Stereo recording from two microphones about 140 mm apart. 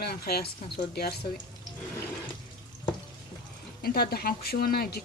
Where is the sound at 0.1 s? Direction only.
90° left.